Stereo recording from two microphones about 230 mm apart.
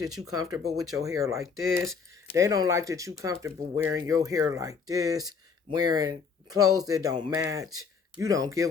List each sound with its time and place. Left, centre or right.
0.3 s speech: centre